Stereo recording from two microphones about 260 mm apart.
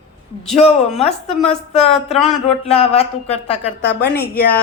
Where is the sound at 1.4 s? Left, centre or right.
Left.